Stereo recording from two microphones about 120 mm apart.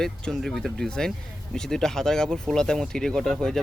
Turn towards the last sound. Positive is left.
turn(degrees=5)  # may be behind; listen again after turning